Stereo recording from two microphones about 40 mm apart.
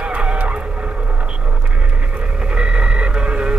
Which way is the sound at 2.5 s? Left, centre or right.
Right.